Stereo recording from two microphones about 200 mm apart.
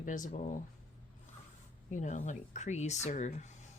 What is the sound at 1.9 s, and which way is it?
Speech, 40° left (ahead or behind).